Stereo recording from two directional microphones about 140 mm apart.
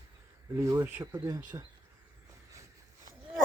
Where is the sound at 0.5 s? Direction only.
20° right (ahead or behind).